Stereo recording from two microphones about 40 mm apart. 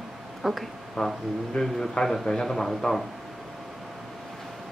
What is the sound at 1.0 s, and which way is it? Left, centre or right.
A man's voice, centre.